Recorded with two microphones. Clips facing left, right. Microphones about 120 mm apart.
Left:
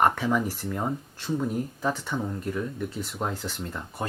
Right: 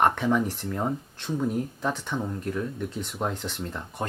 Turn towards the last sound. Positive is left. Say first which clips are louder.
# right 1 dB
turn(degrees=0)  # may be behind; listen again after turning